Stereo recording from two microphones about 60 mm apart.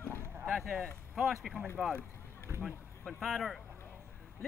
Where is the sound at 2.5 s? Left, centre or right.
Right.